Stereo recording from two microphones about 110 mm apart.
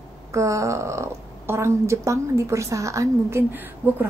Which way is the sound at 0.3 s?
25° right (ahead or behind).